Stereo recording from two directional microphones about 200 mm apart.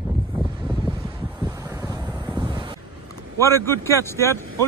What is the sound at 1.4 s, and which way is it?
Wind noise, 15° right (ahead or behind).